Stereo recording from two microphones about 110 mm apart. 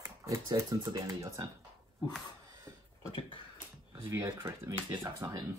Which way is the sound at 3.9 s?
20° right (ahead or behind).